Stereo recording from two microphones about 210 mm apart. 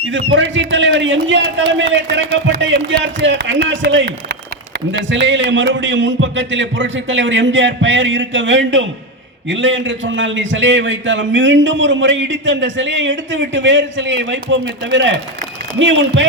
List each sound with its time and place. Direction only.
0.3 s a man's voice: 60° right (ahead or behind)